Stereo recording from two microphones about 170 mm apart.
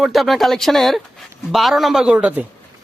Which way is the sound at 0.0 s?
Centre (ahead or behind).